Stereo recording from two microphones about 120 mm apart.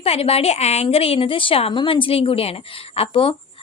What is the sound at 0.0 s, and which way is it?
A woman's voice, 55° left (ahead or behind).